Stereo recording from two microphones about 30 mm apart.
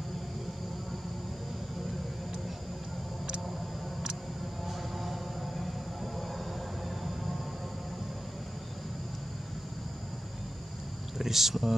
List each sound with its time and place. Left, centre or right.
4.6 s vehicle: centre
6.1 s train: centre
11.1 s speech: centre